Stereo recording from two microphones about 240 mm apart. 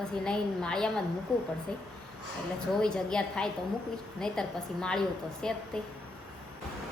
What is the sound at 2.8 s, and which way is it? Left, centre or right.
A woman's voice, centre.